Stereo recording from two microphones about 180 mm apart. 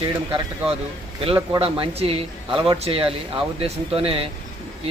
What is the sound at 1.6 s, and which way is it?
Speech, 30° right (ahead or behind).